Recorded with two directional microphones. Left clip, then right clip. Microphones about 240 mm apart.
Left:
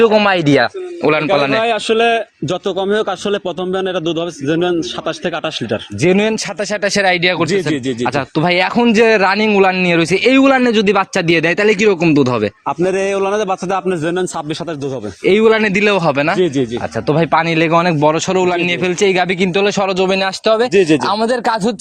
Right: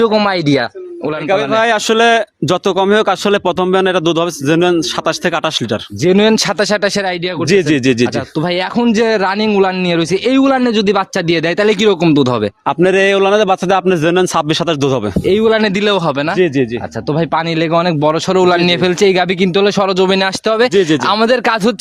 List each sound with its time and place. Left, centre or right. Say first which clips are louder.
0.0 s a man's voice: left 1 dB; right
1.0 s a man's voice: left 2 dB; centre
1.9 s a man's voice: right 3 dB; right
7.0 s a man's voice: left 5 dB; centre
7.5 s speech: right 5 dB; right
8.0 s speech: left 1 dB; centre
12.6 s a man's voice: right 8 dB; right
15.2 s a man's voice: left 2 dB; centre